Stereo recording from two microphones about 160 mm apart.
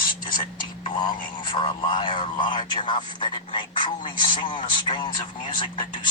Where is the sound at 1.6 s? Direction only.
30° left (ahead or behind).